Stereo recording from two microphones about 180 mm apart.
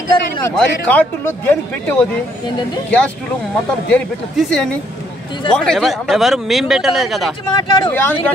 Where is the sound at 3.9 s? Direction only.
5° left (ahead or behind).